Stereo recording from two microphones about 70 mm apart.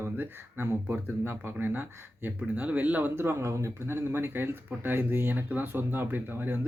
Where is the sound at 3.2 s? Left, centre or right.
Right.